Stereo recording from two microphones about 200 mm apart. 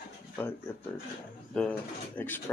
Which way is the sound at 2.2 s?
10° left (ahead or behind).